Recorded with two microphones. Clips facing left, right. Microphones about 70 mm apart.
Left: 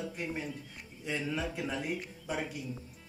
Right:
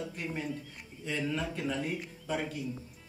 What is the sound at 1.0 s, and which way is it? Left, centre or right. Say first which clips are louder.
Speech: right 1 dB; centre.